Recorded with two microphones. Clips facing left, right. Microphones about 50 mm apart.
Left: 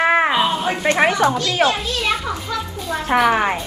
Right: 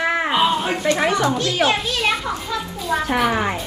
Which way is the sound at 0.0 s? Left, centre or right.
Left.